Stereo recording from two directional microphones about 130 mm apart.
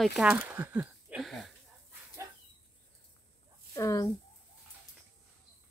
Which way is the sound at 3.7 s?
25° left (ahead or behind).